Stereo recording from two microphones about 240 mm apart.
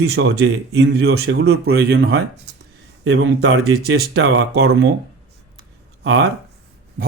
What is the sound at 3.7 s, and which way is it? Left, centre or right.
Speech, right.